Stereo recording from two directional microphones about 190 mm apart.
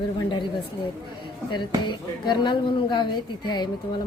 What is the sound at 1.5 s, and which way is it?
A woman's voice, 25° left (ahead or behind).